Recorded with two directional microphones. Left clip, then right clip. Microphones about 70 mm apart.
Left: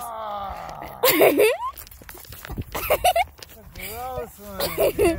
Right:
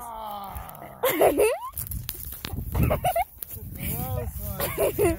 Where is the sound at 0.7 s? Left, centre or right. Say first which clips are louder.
Left 5 dB; left.